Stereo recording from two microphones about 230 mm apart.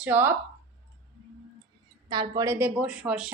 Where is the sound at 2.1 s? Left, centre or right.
Centre.